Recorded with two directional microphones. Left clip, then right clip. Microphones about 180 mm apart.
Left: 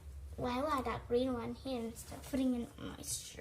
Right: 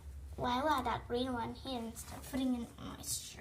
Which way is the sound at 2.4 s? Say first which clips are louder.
Left 1 dB; 10° right (ahead or behind).